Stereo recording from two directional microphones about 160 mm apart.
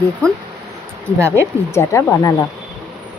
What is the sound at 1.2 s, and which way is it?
Speech, 15° right (ahead or behind).